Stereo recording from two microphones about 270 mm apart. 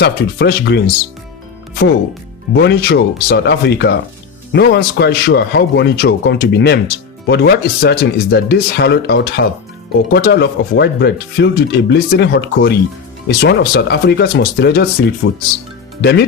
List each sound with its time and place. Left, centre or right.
0.0 s a man's voice: left
2.6 s a man's voice: left